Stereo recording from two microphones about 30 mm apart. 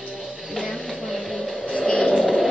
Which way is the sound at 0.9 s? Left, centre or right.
Centre.